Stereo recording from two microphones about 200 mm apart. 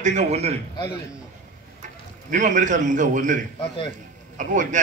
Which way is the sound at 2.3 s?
40° right (ahead or behind).